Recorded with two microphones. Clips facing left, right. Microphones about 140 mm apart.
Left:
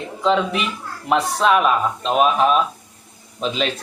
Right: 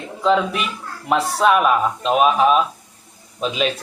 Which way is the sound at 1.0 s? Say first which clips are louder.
Right 1 dB; 5° right (ahead or behind).